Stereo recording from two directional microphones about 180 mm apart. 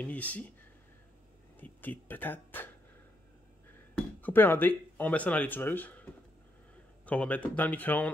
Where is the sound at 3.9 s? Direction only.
10° left (ahead or behind).